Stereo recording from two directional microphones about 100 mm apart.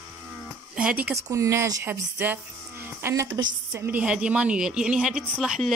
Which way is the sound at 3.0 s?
25° right (ahead or behind).